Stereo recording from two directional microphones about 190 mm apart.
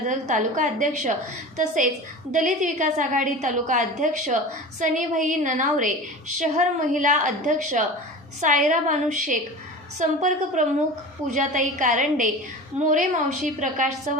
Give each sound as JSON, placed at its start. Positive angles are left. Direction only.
{"t": 0.1, "sound": "a woman's voice", "side_deg": -40}